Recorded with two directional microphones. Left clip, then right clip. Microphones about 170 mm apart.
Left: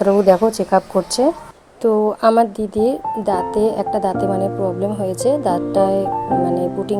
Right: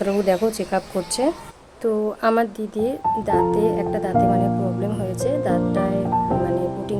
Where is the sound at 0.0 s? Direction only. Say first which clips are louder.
Left 7 dB; 15° left (ahead or behind).